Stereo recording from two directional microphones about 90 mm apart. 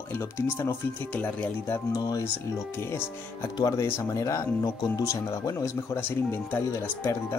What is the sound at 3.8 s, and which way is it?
Speech, 30° left (ahead or behind).